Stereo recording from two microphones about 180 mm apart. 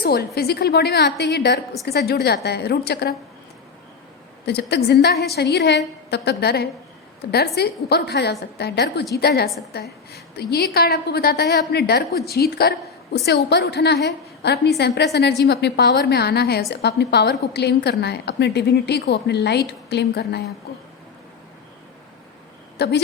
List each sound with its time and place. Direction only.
0.0 s a woman's voice: 60° left (ahead or behind)
4.4 s a woman's voice: 65° left (ahead or behind)
22.8 s a woman's voice: 65° left (ahead or behind)